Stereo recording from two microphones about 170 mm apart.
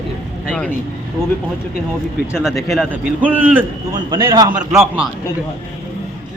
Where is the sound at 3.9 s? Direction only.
25° right (ahead or behind).